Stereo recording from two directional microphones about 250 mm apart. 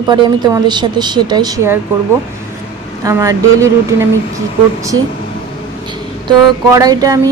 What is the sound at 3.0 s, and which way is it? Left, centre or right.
Speech, centre.